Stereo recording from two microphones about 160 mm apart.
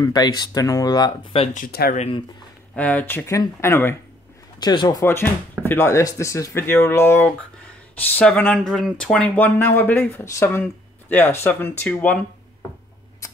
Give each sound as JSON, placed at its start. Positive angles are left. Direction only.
{"t": 0.0, "sound": "speech", "side_deg": 25}
{"t": 1.3, "sound": "speech", "side_deg": 40}
{"t": 1.6, "sound": "speech", "side_deg": 70}
{"t": 2.0, "sound": "speech", "side_deg": 35}
{"t": 2.7, "sound": "speech", "side_deg": 10}
{"t": 4.6, "sound": "speech", "side_deg": 25}